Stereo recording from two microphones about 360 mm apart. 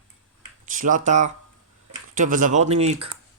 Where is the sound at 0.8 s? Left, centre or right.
Right.